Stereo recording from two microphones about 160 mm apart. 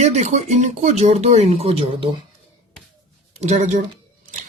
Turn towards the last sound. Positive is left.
turn(degrees=-50)  # may be behind; listen again after turning